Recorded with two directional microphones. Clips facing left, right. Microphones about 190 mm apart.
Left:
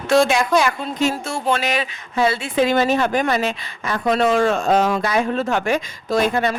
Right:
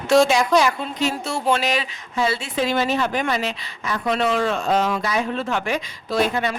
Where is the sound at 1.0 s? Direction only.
50° left (ahead or behind).